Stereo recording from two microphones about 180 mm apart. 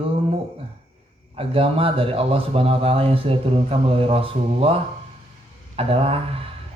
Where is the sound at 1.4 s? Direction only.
30° right (ahead or behind).